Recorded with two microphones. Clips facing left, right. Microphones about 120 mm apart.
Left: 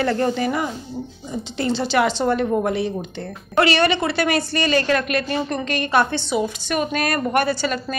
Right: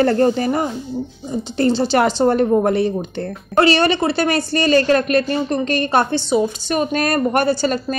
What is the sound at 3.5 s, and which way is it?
A woman's voice, 35° right (ahead or behind).